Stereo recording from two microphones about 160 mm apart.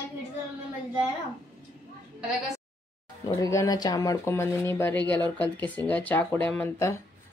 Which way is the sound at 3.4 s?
20° left (ahead or behind).